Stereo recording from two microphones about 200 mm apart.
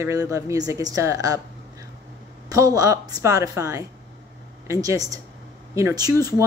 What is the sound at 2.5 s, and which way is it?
A woman's voice, 15° right (ahead or behind).